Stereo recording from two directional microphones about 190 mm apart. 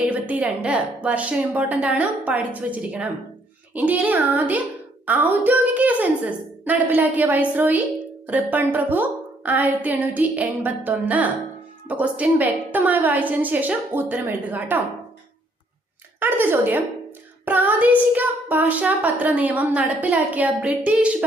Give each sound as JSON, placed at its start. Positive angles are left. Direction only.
{"t": 0.1, "sound": "child singing", "side_deg": -10}
{"t": 16.2, "sound": "child singing", "side_deg": -10}